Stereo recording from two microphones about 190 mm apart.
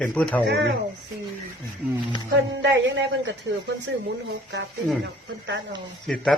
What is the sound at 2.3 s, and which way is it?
A woman's voice, 70° right (ahead or behind).